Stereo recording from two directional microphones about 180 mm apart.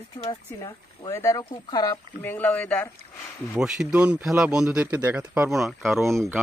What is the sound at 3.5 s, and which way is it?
Speech, centre (ahead or behind).